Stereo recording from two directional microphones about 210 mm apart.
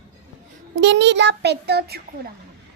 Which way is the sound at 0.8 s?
55° right (ahead or behind).